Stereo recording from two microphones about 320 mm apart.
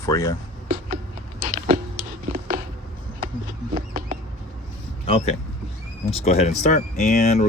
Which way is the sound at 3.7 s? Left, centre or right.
Right.